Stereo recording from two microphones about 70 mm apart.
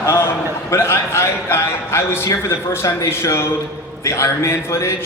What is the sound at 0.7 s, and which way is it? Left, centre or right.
A man's voice, left.